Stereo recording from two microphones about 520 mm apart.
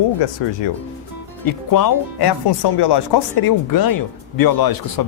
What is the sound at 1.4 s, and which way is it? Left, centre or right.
Speech, left.